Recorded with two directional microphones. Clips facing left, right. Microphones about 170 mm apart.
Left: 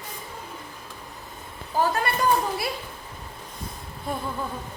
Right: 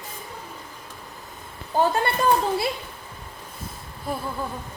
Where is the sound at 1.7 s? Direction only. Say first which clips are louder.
Right 2 dB; 25° right (ahead or behind).